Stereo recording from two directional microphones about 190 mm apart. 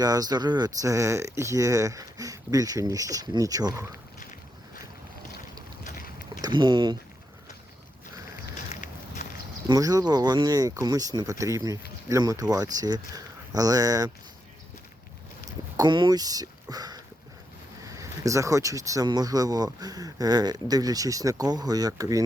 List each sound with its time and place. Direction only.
0.0 s speech: 20° right (ahead or behind)
5.8 s boat: 40° left (ahead or behind)
6.4 s speech: 25° right (ahead or behind)
8.7 s a sound: 40° left (ahead or behind)
9.6 s speech: 20° right (ahead or behind)
15.4 s a sound: 20° right (ahead or behind)
17.8 s speech: 15° right (ahead or behind)